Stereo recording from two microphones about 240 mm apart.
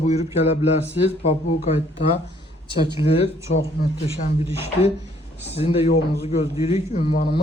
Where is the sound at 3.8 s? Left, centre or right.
Left.